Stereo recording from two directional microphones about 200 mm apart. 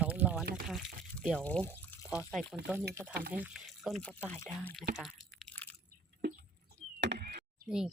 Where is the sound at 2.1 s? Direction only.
5° right (ahead or behind).